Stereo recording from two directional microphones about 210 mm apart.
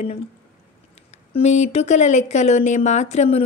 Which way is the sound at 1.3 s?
35° left (ahead or behind).